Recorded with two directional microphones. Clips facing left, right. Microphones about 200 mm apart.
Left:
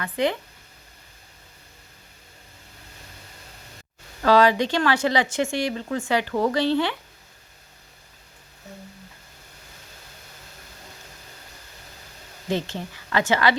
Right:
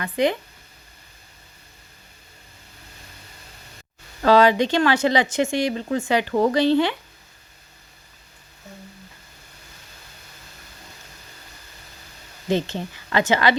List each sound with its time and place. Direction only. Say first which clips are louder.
0.0 s speech: right 3 dB; 15° right (ahead or behind)
4.2 s speech: right 2 dB; 20° right (ahead or behind)
12.5 s speech: right 4 dB; 20° right (ahead or behind)